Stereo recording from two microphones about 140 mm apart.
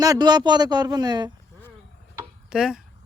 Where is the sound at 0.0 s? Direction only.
30° right (ahead or behind).